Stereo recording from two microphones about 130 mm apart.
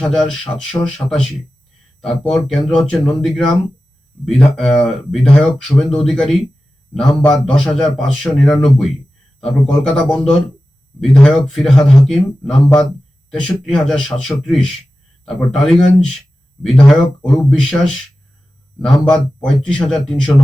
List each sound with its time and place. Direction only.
0.0 s speech: 5° left (ahead or behind)
1.0 s speech: 20° left (ahead or behind)
2.0 s speech: 5° left (ahead or behind)